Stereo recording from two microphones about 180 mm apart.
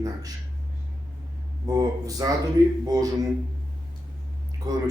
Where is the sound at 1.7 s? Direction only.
20° right (ahead or behind).